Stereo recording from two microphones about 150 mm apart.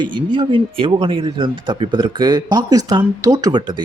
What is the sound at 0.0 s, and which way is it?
Speech, 30° right (ahead or behind).